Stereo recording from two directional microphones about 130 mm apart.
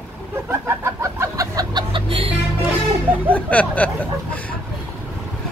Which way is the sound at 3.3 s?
10° left (ahead or behind).